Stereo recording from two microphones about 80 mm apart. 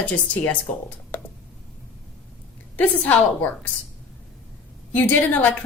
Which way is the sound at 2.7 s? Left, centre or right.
Left.